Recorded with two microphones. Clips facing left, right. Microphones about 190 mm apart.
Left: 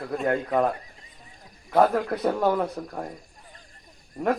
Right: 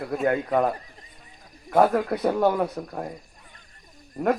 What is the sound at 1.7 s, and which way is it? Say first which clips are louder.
A man's voice: right 1 dB; 5° right (ahead or behind).